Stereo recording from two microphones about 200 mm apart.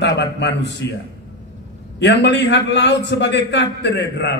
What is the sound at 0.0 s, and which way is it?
Speech, 60° left (ahead or behind).